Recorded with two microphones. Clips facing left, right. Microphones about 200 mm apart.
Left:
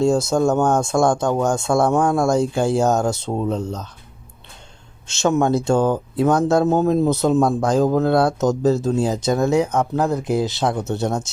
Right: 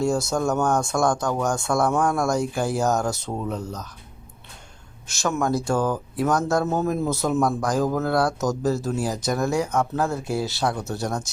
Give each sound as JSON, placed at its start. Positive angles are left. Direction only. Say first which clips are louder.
{"t": 0.0, "sound": "speech", "louder": "left 6 dB", "side_deg": 20}
{"t": 5.2, "sound": "speech", "louder": "left 6 dB", "side_deg": 25}